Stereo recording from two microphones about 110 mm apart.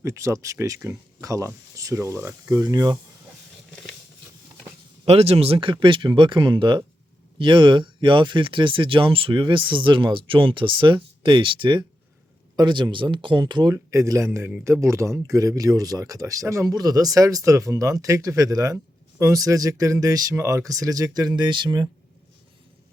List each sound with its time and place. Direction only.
0.0 s speech: 30° right (ahead or behind)
5.0 s speech: 65° right (ahead or behind); by 13.7 s 40° right (ahead or behind)
13.7 s speech: 25° right (ahead or behind)